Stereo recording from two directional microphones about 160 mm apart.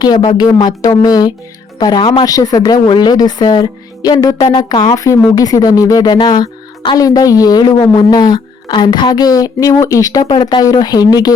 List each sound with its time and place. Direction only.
0.0 s a woman's voice: 25° left (ahead or behind)